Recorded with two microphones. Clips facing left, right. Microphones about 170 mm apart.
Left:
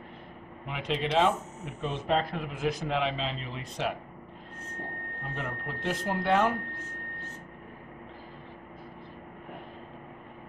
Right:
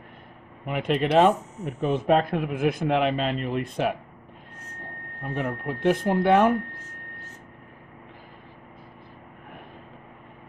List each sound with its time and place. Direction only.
0.7 s speech: 55° right (ahead or behind)
5.3 s speech: 50° right (ahead or behind)